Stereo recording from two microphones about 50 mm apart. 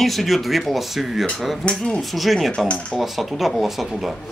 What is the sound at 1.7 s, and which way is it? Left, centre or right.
Speech, centre.